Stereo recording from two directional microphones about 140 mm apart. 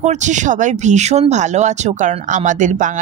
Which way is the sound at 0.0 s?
55° right (ahead or behind).